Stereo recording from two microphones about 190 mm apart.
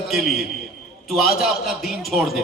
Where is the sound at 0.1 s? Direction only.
Centre (ahead or behind).